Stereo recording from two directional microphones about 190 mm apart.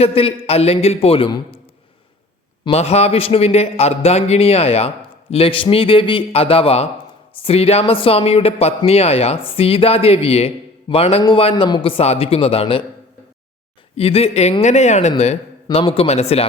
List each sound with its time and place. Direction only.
0.0 s speech: 30° left (ahead or behind)
2.6 s a man's voice: 35° left (ahead or behind)
13.9 s speech: 30° left (ahead or behind)